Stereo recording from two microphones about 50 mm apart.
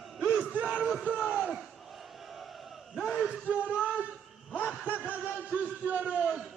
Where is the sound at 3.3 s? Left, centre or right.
Right.